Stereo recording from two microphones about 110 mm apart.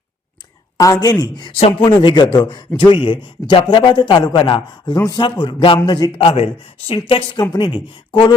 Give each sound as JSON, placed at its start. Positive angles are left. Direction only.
{"t": 0.8, "sound": "speech", "side_deg": 35}
{"t": 4.9, "sound": "speech", "side_deg": 35}
{"t": 5.2, "sound": "speech", "side_deg": 45}
{"t": 6.1, "sound": "speech", "side_deg": 65}